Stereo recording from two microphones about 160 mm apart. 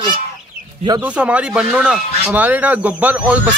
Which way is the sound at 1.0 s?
10° right (ahead or behind).